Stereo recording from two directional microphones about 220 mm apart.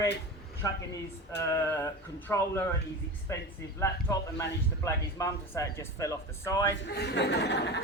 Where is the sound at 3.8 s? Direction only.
10° left (ahead or behind).